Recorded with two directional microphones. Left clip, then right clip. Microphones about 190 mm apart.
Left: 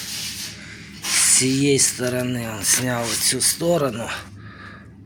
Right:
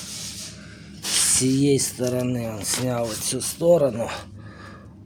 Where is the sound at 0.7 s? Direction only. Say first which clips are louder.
Left 6 dB; 20° right (ahead or behind).